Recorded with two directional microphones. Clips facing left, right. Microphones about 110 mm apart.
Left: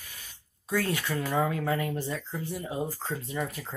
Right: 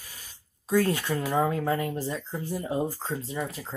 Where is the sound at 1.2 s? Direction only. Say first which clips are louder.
Even; 15° right (ahead or behind).